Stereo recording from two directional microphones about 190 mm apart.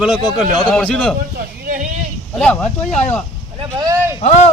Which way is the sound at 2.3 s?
5° left (ahead or behind).